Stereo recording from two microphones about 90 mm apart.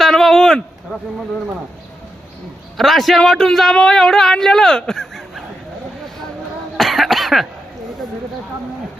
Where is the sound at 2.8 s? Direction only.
Centre (ahead or behind).